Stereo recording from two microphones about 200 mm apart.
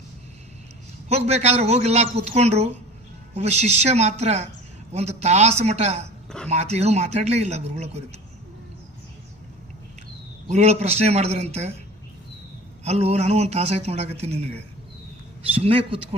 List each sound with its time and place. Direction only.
1.0 s speech: 30° right (ahead or behind)
6.2 s a sound: 5° left (ahead or behind)
6.5 s speech: 35° right (ahead or behind)
10.5 s speech: 35° right (ahead or behind)
12.8 s a man's voice: 30° right (ahead or behind)